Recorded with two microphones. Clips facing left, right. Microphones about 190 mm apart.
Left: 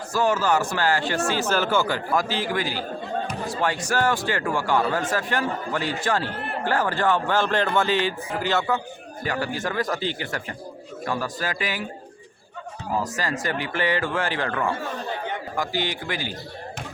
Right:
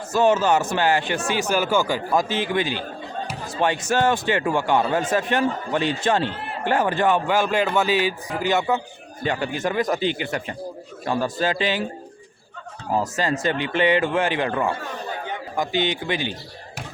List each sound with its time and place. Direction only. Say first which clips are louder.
0.1 s speech: right 4 dB; 20° right (ahead or behind)
3.2 s a sound: left 3 dB; centre (ahead or behind)
3.5 s speech: right 4 dB; 20° right (ahead or behind)
13.0 s speech: right 5 dB; 25° right (ahead or behind)